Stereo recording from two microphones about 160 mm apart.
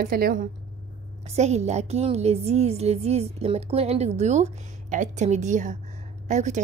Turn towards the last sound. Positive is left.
turn(degrees=-45)  # may be behind; listen again after turning